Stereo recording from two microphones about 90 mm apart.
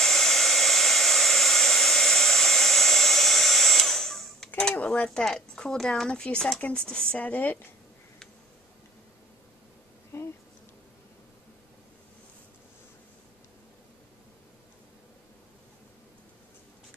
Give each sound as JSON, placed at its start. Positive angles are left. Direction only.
{"t": 0.0, "sound": "hair dryer", "side_deg": 5}
{"t": 4.6, "sound": "speech", "side_deg": 10}
{"t": 10.1, "sound": "bee", "side_deg": 30}